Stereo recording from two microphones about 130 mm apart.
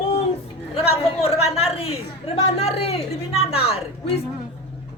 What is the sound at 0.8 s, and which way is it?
A woman's voice, 50° left (ahead or behind).